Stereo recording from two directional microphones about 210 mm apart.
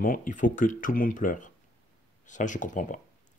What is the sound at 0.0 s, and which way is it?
Speech, 40° left (ahead or behind).